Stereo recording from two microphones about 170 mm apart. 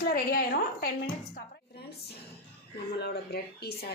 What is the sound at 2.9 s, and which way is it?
Speech, 70° left (ahead or behind).